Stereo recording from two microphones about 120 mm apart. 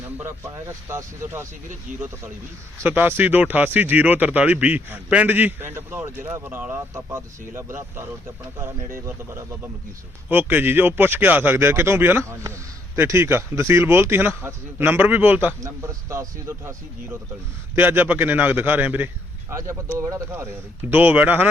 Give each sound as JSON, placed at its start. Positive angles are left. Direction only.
{"t": 0.2, "sound": "speech", "side_deg": -25}
{"t": 1.9, "sound": "speech", "side_deg": -90}
{"t": 2.7, "sound": "speech", "side_deg": -15}
{"t": 15.6, "sound": "speech", "side_deg": -25}